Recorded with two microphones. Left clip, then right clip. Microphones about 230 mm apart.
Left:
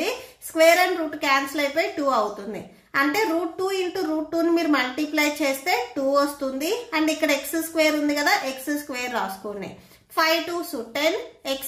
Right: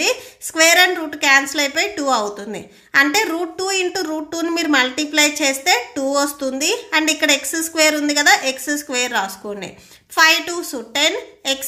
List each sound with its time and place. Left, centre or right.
0.6 s a woman's voice: right
10.9 s a woman's voice: right